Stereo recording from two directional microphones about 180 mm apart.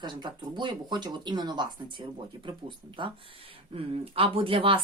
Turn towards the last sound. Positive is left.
turn(degrees=-30)  # may be behind; listen again after turning